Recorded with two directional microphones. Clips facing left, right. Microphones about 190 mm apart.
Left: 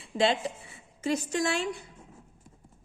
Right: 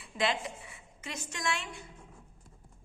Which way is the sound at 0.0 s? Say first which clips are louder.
Left 6 dB; 30° left (ahead or behind).